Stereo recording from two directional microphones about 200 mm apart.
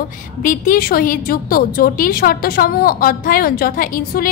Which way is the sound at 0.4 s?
40° left (ahead or behind).